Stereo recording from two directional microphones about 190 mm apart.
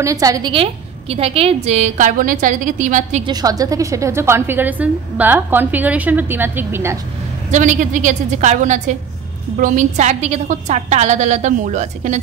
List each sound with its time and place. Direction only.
0.0 s a woman's voice: 20° right (ahead or behind); by 3.3 s 40° right (ahead or behind)
3.3 s a woman's voice: 20° right (ahead or behind)
7.5 s a woman's voice: 40° right (ahead or behind)